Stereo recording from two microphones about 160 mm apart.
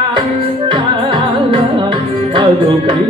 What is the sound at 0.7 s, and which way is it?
Music, 30° right (ahead or behind).